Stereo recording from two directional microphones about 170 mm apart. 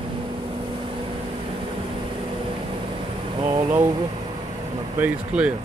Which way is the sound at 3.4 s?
30° right (ahead or behind).